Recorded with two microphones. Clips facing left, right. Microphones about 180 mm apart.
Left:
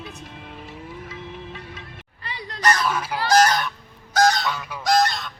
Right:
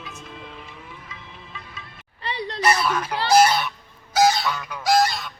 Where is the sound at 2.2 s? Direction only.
30° right (ahead or behind).